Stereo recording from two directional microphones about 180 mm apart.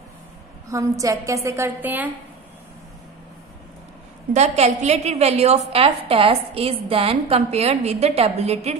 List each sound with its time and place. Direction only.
0.7 s a woman's voice: 20° right (ahead or behind)
4.3 s a woman's voice: 40° right (ahead or behind)